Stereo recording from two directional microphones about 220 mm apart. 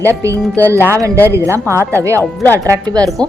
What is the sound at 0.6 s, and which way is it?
Speech, 10° left (ahead or behind).